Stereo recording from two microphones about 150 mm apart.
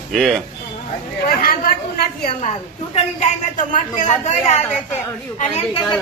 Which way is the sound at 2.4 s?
50° left (ahead or behind).